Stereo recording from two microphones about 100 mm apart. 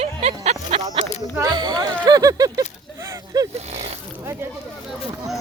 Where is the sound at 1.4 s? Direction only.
45° right (ahead or behind).